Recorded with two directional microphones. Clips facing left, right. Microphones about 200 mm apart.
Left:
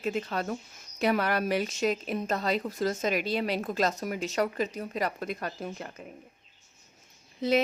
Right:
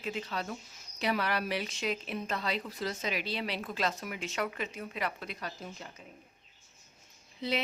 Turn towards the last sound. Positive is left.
turn(degrees=45)  # may be behind; listen again after turning